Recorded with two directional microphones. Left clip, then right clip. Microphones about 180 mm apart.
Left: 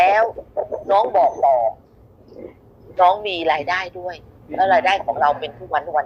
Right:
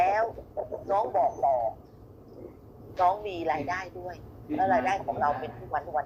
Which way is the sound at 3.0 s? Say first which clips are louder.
Left 10 dB; 35° left (ahead or behind).